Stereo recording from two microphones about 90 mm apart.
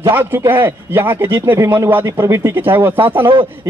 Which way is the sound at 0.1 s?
25° right (ahead or behind).